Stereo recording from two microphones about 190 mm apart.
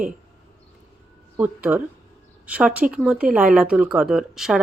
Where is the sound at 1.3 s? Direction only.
10° right (ahead or behind).